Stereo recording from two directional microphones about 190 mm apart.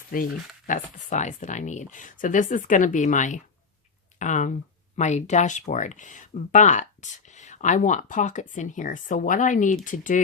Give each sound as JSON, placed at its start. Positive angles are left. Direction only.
{"t": 0.7, "sound": "speech", "side_deg": 40}